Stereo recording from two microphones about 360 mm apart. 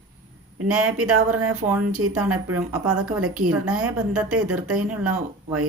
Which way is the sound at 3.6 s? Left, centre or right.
Centre.